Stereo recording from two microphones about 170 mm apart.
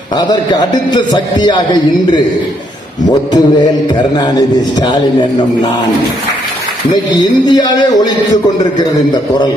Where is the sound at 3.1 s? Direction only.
25° left (ahead or behind).